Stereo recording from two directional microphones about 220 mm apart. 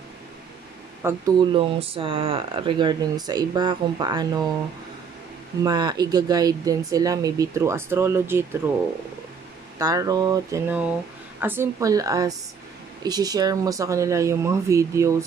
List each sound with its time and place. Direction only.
1.0 s speech: 20° right (ahead or behind)
5.6 s speech: 20° right (ahead or behind)
9.8 s speech: 15° right (ahead or behind)